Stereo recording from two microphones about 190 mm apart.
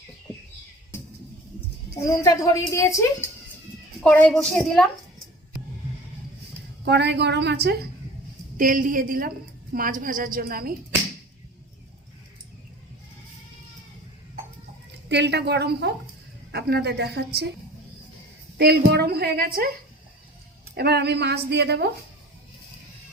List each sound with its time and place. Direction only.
2.0 s a woman's voice: 20° left (ahead or behind); by 4.9 s 5° left (ahead or behind)
6.8 s a woman's voice: 65° right (ahead or behind)
8.5 s a woman's voice: 45° right (ahead or behind)
15.1 s a woman's voice: 65° right (ahead or behind)
18.5 s a woman's voice: 55° right (ahead or behind)
20.7 s a woman's voice: 60° right (ahead or behind)